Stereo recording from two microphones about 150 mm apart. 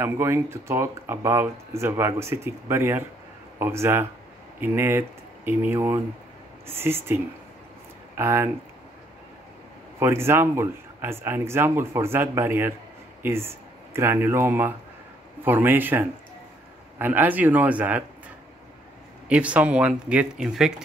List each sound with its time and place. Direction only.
0.0 s speech: 15° right (ahead or behind)
8.2 s speech: 15° right (ahead or behind)
9.9 s speech: 15° right (ahead or behind)
19.2 s speech: 10° right (ahead or behind)